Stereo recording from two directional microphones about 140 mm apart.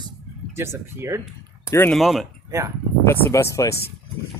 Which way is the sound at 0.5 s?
15° right (ahead or behind).